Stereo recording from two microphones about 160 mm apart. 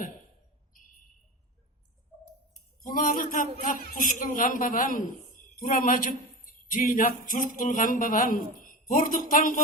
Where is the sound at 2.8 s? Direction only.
60° left (ahead or behind).